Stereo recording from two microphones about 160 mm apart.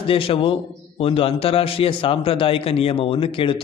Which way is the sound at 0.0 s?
35° left (ahead or behind).